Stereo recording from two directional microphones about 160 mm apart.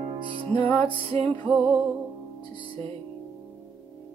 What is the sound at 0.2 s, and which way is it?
Music, 30° right (ahead or behind).